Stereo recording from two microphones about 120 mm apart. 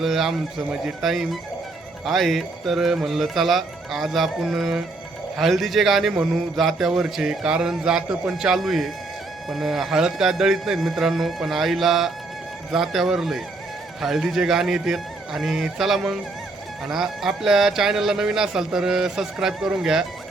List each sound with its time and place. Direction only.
0.0 s a man's voice: centre (ahead or behind)